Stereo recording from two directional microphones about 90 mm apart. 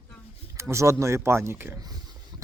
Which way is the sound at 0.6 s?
30° right (ahead or behind).